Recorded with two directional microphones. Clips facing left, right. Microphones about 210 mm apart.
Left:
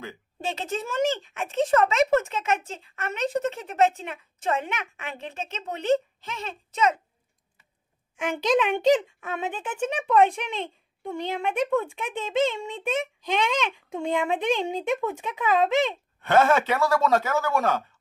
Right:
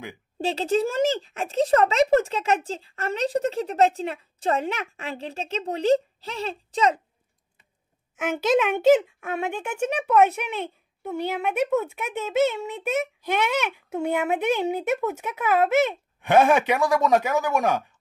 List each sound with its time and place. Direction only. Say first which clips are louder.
0.4 s speech: right 8 dB; 35° right (ahead or behind)
8.2 s speech: right 2 dB; 5° right (ahead or behind)